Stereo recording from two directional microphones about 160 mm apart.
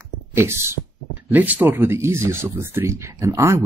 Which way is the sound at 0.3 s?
15° right (ahead or behind).